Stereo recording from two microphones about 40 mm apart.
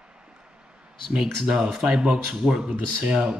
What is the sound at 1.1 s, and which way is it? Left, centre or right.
Speech, right.